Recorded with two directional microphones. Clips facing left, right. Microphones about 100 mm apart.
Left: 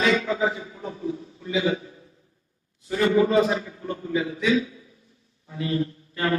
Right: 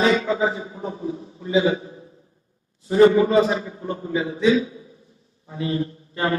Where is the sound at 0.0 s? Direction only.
30° right (ahead or behind).